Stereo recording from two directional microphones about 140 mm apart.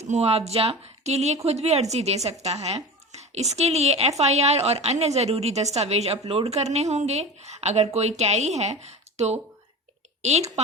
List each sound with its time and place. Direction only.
0.0 s a woman's voice: 50° right (ahead or behind)